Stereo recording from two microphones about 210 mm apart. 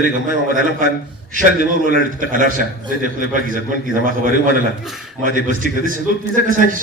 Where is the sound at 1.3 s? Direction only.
40° right (ahead or behind).